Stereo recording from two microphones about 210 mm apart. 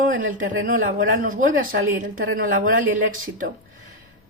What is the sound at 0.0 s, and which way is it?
Speech, 40° right (ahead or behind).